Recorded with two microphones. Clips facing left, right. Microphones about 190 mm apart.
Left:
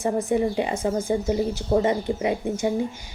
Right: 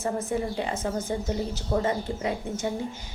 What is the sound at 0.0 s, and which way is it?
A woman's voice, 15° left (ahead or behind).